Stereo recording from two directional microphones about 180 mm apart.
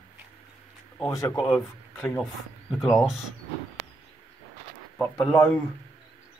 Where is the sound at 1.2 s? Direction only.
20° left (ahead or behind); by 3.1 s 5° left (ahead or behind).